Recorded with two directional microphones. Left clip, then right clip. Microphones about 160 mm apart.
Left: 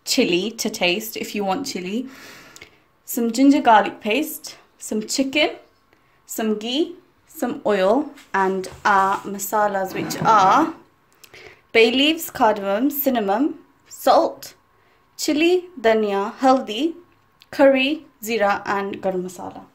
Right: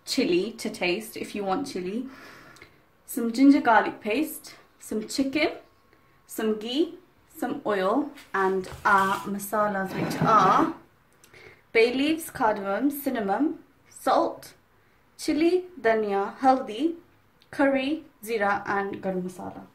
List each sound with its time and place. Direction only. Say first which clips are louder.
0.0 s speech: left 5 dB; 55° left (ahead or behind)
6.2 s a woman's voice: left 4 dB; 70° left (ahead or behind)